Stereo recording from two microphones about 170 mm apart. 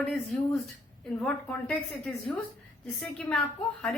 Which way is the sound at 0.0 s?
Centre (ahead or behind).